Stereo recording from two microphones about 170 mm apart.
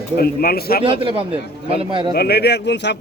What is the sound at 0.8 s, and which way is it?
A man's voice, 30° right (ahead or behind).